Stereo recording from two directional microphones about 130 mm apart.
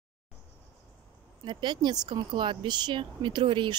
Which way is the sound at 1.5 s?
35° right (ahead or behind).